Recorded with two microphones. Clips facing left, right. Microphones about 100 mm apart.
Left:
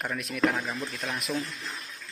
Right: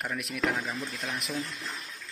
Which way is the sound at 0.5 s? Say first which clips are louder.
Left 1 dB; 15° left (ahead or behind).